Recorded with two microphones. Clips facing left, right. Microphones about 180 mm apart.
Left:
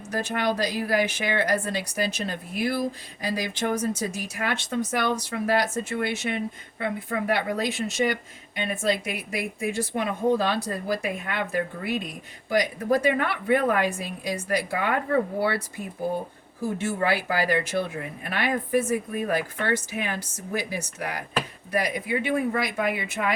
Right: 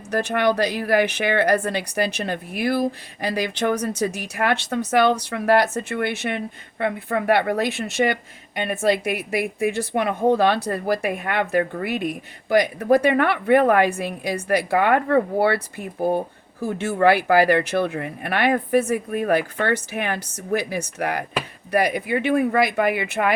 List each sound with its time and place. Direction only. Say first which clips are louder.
0.1 s a woman's voice: right 6 dB; 65° right (ahead or behind)